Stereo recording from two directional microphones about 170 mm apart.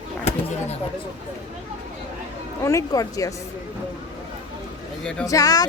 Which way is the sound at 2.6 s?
20° left (ahead or behind).